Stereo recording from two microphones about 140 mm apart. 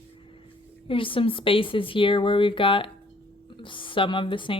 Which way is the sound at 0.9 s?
40° left (ahead or behind).